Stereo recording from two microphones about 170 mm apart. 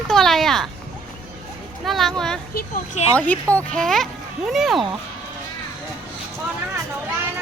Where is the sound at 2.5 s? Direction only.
50° left (ahead or behind).